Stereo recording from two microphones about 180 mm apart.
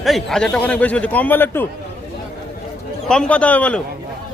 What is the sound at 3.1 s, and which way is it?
Speech, 5° left (ahead or behind).